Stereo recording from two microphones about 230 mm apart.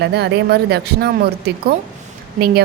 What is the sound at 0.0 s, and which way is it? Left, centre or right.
A woman's voice, right.